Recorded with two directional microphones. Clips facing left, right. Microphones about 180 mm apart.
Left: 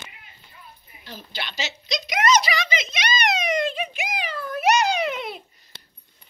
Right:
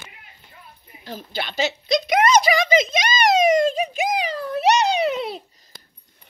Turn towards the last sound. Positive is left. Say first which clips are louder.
# right 4 dB
turn(degrees=-35)  # may be behind; listen again after turning